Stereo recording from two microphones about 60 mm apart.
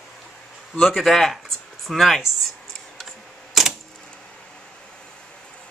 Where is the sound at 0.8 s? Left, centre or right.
Centre.